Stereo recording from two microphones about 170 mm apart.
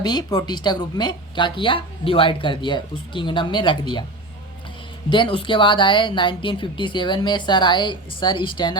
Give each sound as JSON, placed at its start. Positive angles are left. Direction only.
{"t": 0.0, "sound": "speech", "side_deg": 25}
{"t": 5.0, "sound": "speech", "side_deg": 30}